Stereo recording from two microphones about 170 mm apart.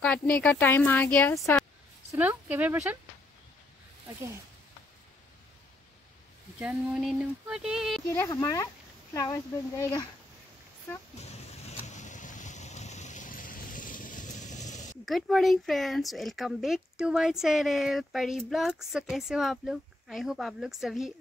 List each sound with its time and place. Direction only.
0.0 s speech: 5° left (ahead or behind)
2.1 s speech: 10° right (ahead or behind)
6.6 s speech: 5° right (ahead or behind)
8.1 s speech: 15° left (ahead or behind)
11.1 s boat: 40° left (ahead or behind)
15.0 s speech: centre (ahead or behind)